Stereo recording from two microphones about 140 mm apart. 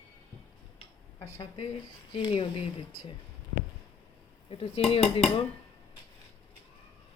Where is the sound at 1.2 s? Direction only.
40° left (ahead or behind).